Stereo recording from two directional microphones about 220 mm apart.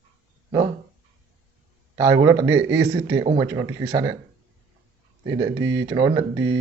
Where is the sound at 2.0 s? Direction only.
15° right (ahead or behind).